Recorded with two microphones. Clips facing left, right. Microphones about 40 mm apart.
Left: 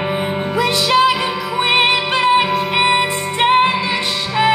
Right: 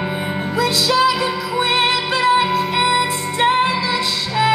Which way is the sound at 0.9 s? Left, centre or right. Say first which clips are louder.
Left 3 dB; left.